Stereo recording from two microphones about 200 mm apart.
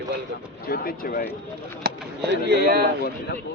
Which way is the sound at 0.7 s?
45° left (ahead or behind).